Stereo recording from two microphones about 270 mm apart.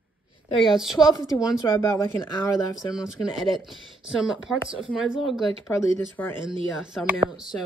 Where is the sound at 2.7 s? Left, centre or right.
Centre.